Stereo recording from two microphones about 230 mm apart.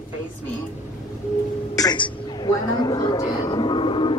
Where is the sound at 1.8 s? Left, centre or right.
Centre.